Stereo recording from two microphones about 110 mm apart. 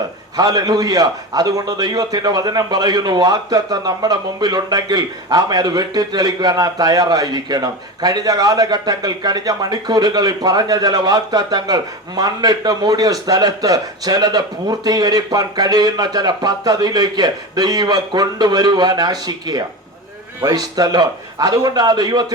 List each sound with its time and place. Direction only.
0.3 s a man's voice: 35° right (ahead or behind)